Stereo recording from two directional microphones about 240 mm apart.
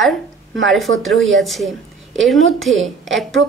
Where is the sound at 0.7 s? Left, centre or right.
Centre.